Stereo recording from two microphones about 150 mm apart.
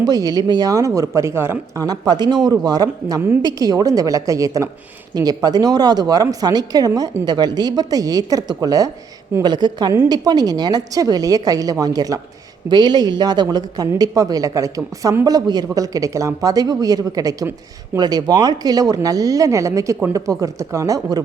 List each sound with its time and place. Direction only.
0.0 s speech: 25° right (ahead or behind)